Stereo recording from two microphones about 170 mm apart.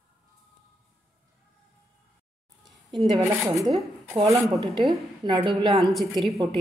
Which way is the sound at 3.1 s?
20° right (ahead or behind).